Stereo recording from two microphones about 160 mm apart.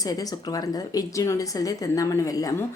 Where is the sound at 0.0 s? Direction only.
25° left (ahead or behind).